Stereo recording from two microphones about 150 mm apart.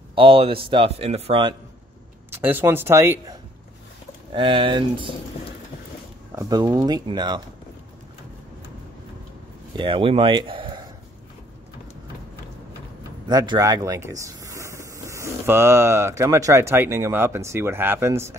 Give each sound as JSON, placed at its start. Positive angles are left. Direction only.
{"t": 0.1, "sound": "speech", "side_deg": -35}
{"t": 2.3, "sound": "speech", "side_deg": -15}
{"t": 4.3, "sound": "speech", "side_deg": -35}
{"t": 6.3, "sound": "speech", "side_deg": -25}
{"t": 9.8, "sound": "speech", "side_deg": -35}
{"t": 13.3, "sound": "speech", "side_deg": -25}